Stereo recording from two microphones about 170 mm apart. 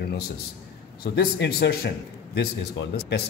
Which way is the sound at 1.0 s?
65° left (ahead or behind).